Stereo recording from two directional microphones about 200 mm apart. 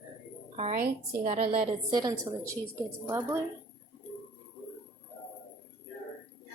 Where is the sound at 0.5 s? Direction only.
35° right (ahead or behind); by 2.3 s 20° right (ahead or behind).